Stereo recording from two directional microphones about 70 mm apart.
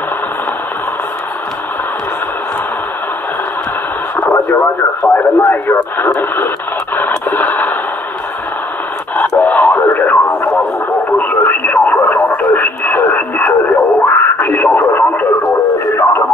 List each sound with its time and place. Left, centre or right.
4.2 s speech: left
7.0 s a sound: left
9.1 s radio: left